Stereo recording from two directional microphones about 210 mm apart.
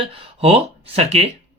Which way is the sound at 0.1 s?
25° right (ahead or behind).